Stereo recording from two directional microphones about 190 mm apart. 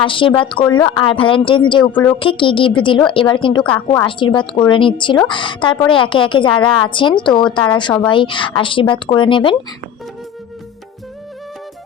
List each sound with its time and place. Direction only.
0.0 s a woman's voice: 25° left (ahead or behind)
1.8 s a woman's voice: 10° left (ahead or behind)
2.1 s a woman's voice: 25° left (ahead or behind)